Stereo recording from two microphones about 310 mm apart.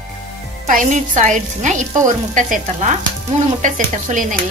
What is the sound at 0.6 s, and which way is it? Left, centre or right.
Stir, right.